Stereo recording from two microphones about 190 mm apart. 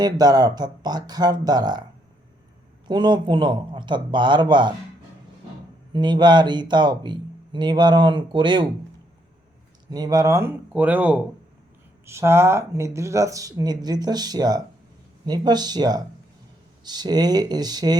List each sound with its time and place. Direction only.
0.0 s speech: 20° right (ahead or behind)
2.8 s speech: 25° right (ahead or behind)
5.9 s speech: 25° right (ahead or behind)
9.9 s speech: 20° right (ahead or behind)